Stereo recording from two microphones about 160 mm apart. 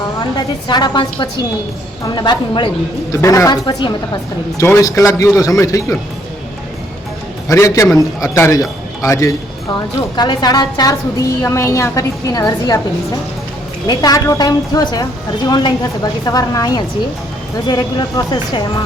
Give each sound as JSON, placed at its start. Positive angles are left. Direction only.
{"t": 0.2, "sound": "a woman's voice", "side_deg": 25}
{"t": 7.4, "sound": "a man's voice", "side_deg": 20}
{"t": 13.8, "sound": "a woman's voice", "side_deg": 25}